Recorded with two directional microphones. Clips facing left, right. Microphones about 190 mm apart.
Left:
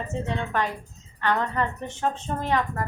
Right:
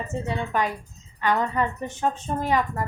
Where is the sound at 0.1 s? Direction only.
10° right (ahead or behind).